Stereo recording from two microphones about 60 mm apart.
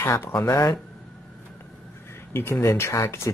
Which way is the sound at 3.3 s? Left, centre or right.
Left.